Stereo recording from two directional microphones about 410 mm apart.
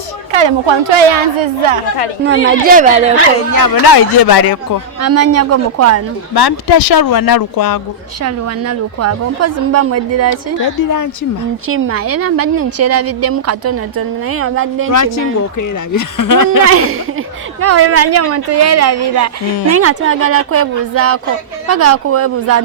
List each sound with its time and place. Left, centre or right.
0.3 s speech: right
2.2 s a woman's voice: centre
3.6 s speech: left
5.0 s a woman's voice: right
6.3 s speech: left
8.2 s a woman's voice: right
11.7 s a woman's voice: right
16.0 s speech: left
16.6 s a woman's voice: right